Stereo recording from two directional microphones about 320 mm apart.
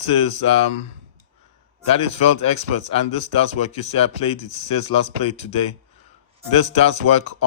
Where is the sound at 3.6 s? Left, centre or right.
Centre.